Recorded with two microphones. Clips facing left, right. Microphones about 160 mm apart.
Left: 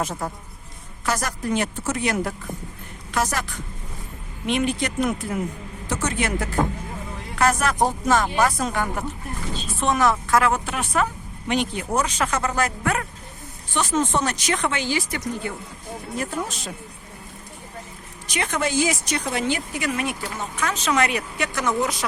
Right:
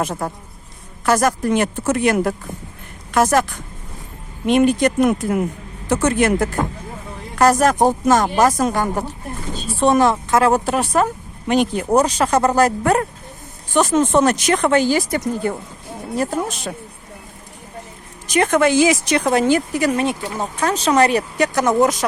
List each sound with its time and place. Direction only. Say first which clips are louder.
0.0 s speech: right 4 dB; 55° right (ahead or behind)
7.3 s speech: right 6 dB; 40° right (ahead or behind); by 10.5 s 25° right (ahead or behind)
10.5 s speech: right 7 dB; 40° right (ahead or behind)
13.7 s speech: right 7 dB; 50° right (ahead or behind)
16.5 s speech: right 7 dB; 60° right (ahead or behind)
18.3 s speech: right 10 dB; 50° right (ahead or behind); by 19.3 s 80° right
19.3 s speech: right 10 dB; 45° right (ahead or behind)